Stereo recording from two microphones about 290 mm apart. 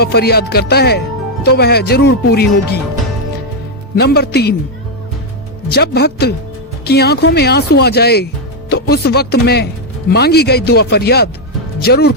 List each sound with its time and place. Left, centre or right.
0.0 s speech: left
3.9 s speech: left
5.7 s speech: left